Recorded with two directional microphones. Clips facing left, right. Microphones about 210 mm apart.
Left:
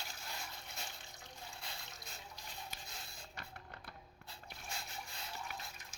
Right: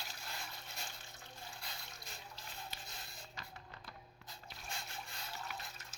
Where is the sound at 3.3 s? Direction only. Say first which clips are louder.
Left 2 dB; 60° left (ahead or behind).